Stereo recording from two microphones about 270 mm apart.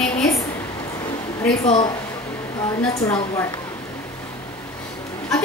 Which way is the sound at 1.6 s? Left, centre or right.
Centre.